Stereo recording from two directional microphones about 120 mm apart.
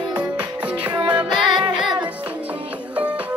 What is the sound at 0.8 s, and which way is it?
Music, 40° right (ahead or behind).